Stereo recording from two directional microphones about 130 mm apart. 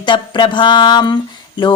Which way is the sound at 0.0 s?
40° left (ahead or behind).